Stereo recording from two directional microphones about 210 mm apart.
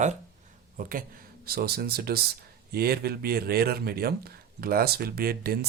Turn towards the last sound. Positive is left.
turn(degrees=-45)  # may be behind; listen again after turning